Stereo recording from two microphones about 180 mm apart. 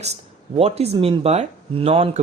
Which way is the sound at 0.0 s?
35° right (ahead or behind).